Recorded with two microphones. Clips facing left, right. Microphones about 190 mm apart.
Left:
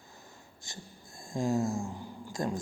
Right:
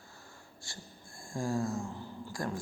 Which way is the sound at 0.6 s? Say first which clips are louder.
Left 2 dB; 20° left (ahead or behind).